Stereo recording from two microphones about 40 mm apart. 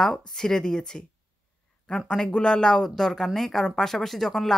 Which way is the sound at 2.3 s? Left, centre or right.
Left.